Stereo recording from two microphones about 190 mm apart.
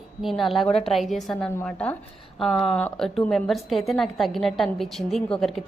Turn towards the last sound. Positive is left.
turn(degrees=0)  # may be behind; listen again after turning